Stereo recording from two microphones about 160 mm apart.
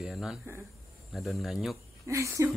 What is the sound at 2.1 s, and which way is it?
Speech, 20° right (ahead or behind).